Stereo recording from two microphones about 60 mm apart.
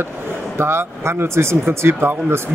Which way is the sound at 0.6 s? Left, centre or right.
Right.